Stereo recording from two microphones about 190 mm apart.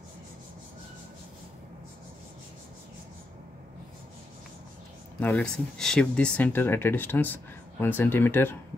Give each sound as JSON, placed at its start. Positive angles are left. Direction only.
{"t": 5.2, "sound": "speech", "side_deg": 5}